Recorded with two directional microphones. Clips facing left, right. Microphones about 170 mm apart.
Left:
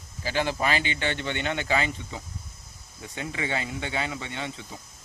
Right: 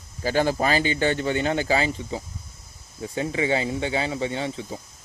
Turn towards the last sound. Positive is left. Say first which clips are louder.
# right 8 dB
turn(degrees=-35)  # may be behind; listen again after turning